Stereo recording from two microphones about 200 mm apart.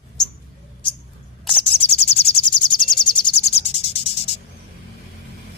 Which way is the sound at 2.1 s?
30° left (ahead or behind).